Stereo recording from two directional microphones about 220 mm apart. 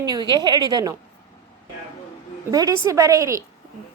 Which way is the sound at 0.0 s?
20° right (ahead or behind).